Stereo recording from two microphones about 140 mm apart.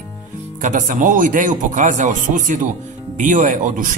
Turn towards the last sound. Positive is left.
turn(degrees=-65)  # may be behind; listen again after turning